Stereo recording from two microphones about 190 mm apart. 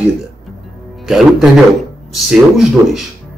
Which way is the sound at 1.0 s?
Centre (ahead or behind).